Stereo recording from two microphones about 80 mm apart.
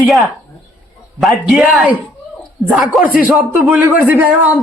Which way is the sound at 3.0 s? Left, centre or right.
Centre.